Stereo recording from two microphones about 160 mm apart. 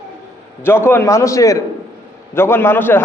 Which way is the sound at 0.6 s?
15° left (ahead or behind).